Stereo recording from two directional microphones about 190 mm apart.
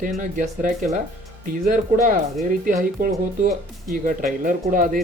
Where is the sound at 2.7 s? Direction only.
45° right (ahead or behind).